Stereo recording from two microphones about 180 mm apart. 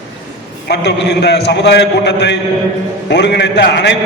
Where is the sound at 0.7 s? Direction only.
70° left (ahead or behind).